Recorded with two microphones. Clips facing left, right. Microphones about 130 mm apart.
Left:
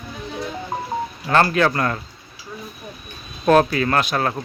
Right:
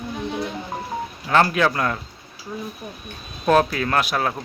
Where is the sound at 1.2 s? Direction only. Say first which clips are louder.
Left 1 dB; centre (ahead or behind).